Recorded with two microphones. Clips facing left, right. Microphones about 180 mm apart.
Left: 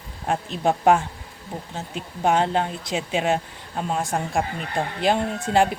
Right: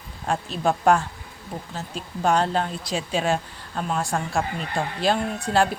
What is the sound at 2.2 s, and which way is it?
Speech, 20° left (ahead or behind).